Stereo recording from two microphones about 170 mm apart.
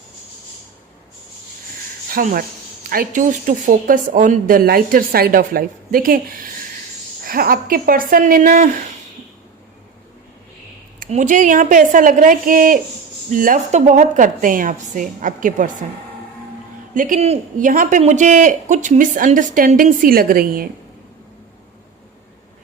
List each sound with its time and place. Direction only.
2.0 s speech: 55° right (ahead or behind)
11.0 s a man's voice: 50° right (ahead or behind)
16.9 s a man's voice: 50° right (ahead or behind)